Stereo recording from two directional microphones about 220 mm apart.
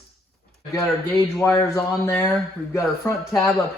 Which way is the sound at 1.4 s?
5° left (ahead or behind).